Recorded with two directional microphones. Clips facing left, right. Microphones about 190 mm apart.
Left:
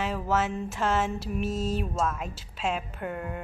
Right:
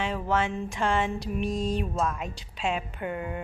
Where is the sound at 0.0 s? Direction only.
5° left (ahead or behind).